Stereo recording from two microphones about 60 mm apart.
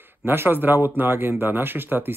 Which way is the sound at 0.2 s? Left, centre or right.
Right.